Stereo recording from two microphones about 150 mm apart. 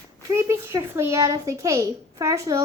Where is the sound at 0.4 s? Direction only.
20° right (ahead or behind).